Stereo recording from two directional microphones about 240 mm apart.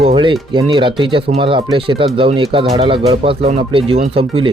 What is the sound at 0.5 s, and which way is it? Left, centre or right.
Speech, centre.